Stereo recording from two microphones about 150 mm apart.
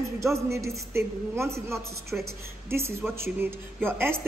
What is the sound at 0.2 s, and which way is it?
A man's voice, 20° right (ahead or behind).